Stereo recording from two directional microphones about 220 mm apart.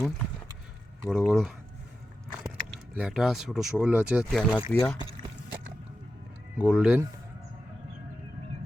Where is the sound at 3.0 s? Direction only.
Centre (ahead or behind).